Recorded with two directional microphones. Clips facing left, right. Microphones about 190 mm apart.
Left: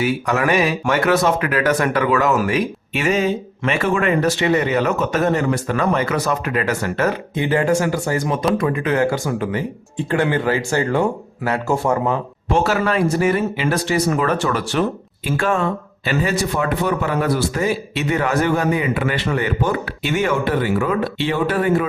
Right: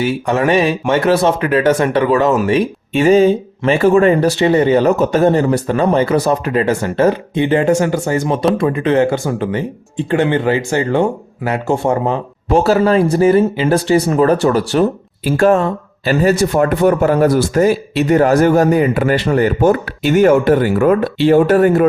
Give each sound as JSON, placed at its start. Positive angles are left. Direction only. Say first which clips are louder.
{"t": 0.0, "sound": "a man's voice", "louder": "right 4 dB", "side_deg": -30}